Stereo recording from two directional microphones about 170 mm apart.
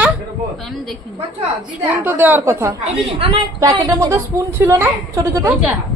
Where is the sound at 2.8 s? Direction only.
35° right (ahead or behind); by 5.6 s 15° right (ahead or behind).